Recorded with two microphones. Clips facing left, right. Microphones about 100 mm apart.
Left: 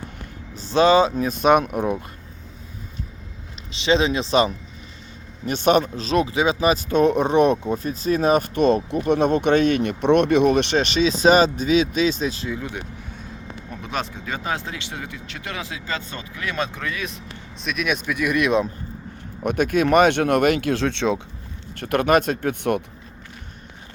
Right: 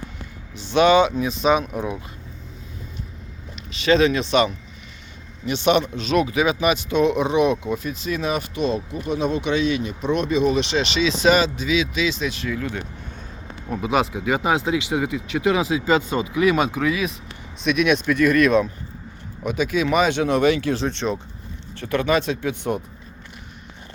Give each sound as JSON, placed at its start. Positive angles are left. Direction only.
{"t": 0.5, "sound": "speech", "side_deg": 35}
{"t": 3.7, "sound": "speech", "side_deg": 25}
{"t": 5.5, "sound": "speech", "side_deg": 45}
{"t": 12.5, "sound": "speech", "side_deg": 15}
{"t": 13.7, "sound": "speech", "side_deg": -10}
{"t": 19.5, "sound": "speech", "side_deg": 55}